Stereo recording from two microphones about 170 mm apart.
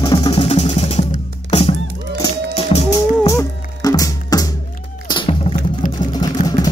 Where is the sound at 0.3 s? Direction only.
35° left (ahead or behind).